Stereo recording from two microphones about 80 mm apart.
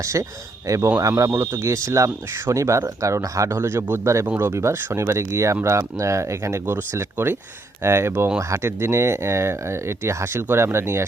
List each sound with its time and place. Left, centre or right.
0.0 s speech: right